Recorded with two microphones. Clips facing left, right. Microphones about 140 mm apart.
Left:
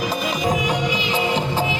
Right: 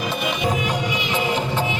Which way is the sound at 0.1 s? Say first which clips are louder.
Left 1 dB; 35° left (ahead or behind).